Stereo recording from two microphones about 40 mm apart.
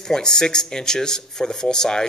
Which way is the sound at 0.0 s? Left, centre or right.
Centre.